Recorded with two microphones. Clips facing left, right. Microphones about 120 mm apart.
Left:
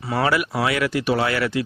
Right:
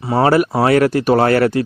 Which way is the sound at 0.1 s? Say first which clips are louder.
Right 8 dB; 40° right (ahead or behind).